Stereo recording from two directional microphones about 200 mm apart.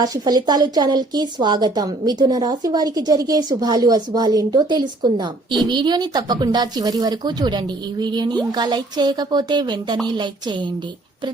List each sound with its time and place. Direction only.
0.0 s speech: 20° right (ahead or behind)